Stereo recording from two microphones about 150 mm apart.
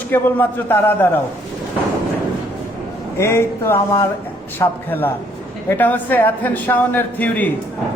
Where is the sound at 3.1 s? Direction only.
20° left (ahead or behind).